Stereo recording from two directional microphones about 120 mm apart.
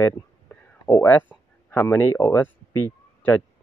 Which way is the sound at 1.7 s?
20° left (ahead or behind).